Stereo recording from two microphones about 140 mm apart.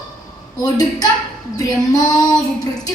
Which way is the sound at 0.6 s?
25° left (ahead or behind).